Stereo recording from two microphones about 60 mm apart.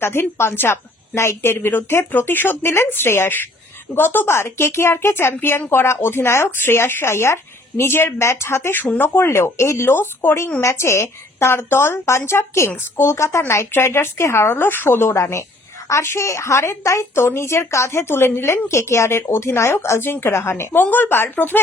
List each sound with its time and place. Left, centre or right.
0.0 s a woman's voice: left
20.8 s speech: left